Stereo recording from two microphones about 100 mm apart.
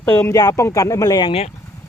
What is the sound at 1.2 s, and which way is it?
Speech, 60° left (ahead or behind).